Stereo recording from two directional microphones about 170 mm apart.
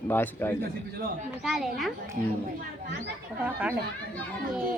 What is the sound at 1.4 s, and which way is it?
Speech, centre (ahead or behind).